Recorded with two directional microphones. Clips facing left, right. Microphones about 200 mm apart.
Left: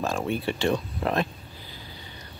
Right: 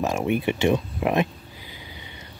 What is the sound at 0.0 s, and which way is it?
Speech, 20° right (ahead or behind).